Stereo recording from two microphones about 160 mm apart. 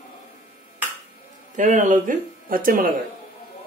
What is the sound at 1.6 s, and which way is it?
Speech, 50° right (ahead or behind).